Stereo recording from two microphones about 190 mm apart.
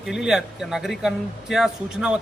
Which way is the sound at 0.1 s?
5° right (ahead or behind).